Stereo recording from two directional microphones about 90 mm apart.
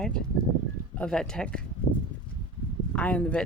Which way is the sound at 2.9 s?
15° left (ahead or behind).